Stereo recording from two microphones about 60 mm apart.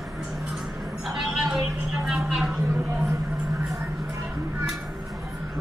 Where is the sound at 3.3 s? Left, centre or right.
Right.